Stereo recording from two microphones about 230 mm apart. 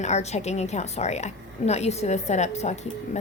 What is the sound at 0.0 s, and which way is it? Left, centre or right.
A woman's voice, left.